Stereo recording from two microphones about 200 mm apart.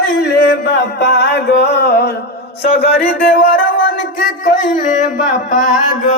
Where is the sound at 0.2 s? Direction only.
55° left (ahead or behind).